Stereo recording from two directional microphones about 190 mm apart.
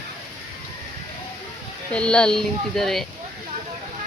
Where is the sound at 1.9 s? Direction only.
5° left (ahead or behind).